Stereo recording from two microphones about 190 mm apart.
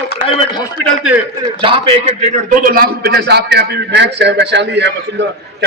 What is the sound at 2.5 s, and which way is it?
A man's voice, 50° right (ahead or behind).